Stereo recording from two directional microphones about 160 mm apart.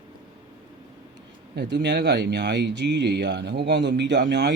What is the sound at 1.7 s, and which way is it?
Speech, 90° right.